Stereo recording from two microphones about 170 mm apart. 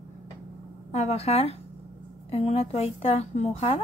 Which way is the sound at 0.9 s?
40° left (ahead or behind).